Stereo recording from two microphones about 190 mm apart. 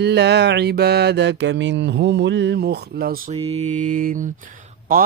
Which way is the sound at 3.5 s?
35° right (ahead or behind).